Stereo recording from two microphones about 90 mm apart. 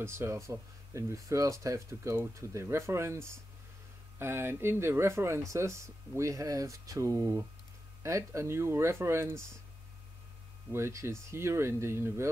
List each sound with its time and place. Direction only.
0.0 s speech: 30° right (ahead or behind)
10.7 s speech: 30° right (ahead or behind)